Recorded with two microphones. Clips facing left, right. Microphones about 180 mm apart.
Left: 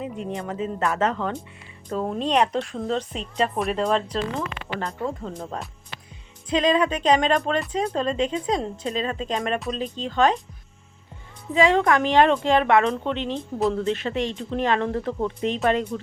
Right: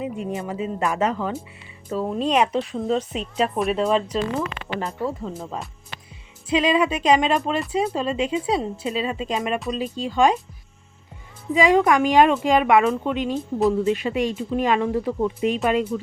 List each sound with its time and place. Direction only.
0.0 s speech: 5° right (ahead or behind)
11.5 s speech: 15° right (ahead or behind)